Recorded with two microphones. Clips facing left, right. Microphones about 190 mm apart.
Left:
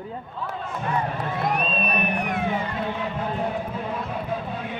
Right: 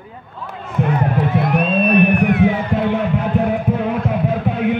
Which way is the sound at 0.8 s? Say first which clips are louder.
Right 9 dB; 75° right (ahead or behind).